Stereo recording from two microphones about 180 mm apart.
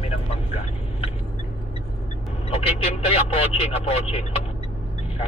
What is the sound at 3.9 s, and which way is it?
Speech, 35° left (ahead or behind).